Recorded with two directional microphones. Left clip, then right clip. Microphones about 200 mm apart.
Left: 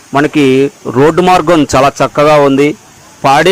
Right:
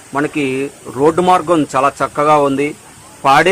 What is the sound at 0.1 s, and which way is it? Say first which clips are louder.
A man's voice: left 9 dB; 40° left (ahead or behind).